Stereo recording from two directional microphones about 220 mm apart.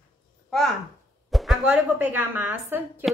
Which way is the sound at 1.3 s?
Centre (ahead or behind).